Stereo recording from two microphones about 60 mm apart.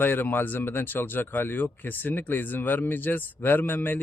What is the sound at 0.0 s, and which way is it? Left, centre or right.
Speech, left.